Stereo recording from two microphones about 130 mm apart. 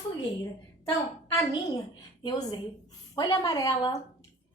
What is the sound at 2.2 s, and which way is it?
A woman's voice, 30° left (ahead or behind).